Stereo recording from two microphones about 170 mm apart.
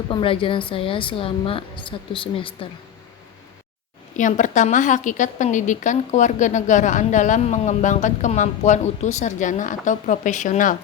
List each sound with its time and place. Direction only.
0.1 s a woman's voice: 30° left (ahead or behind)
4.2 s a woman's voice: 50° left (ahead or behind)